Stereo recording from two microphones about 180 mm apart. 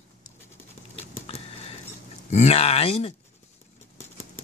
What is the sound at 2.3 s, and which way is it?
Speech, 35° left (ahead or behind).